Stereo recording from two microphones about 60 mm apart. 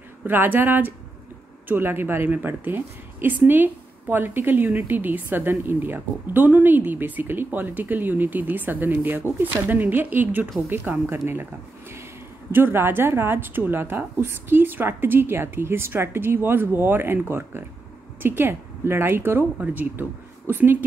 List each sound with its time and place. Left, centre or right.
0.2 s a woman's voice: right
12.4 s a woman's voice: right
19.6 s speech: right